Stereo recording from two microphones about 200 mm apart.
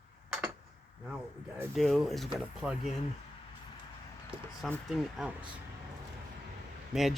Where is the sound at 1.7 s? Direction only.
Centre (ahead or behind).